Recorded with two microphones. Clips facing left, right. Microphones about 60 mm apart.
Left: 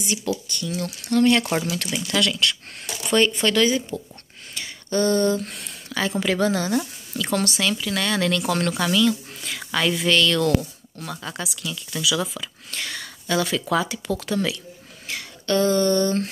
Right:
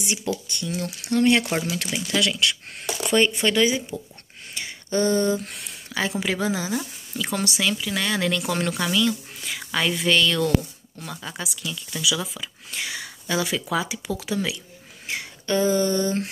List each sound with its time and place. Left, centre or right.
0.5 s speech: right
4.6 s a sound: right
4.9 s speech: centre
15.0 s speech: right